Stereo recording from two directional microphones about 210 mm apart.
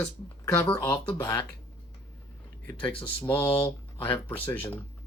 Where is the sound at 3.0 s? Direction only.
10° left (ahead or behind).